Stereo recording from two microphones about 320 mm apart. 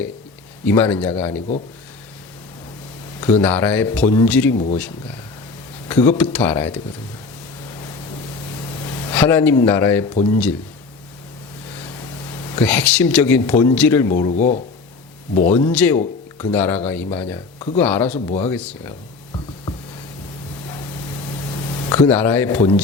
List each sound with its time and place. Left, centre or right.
0.6 s speech: centre
3.2 s speech: centre
4.5 s speech: left
6.1 s speech: centre
9.0 s speech: centre
10.2 s speech: centre
12.5 s speech: centre
14.3 s speech: left; by 18.1 s centre
18.1 s speech: centre
18.4 s speech: centre
21.8 s speech: centre